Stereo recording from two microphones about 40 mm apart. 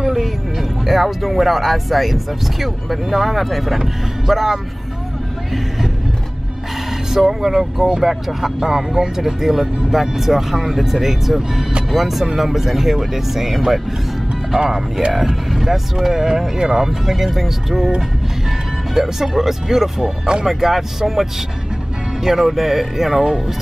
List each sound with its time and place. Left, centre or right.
0.0 s speech: centre
6.9 s speech: centre
14.6 s speech: centre
15.1 s speech: centre
18.9 s speech: centre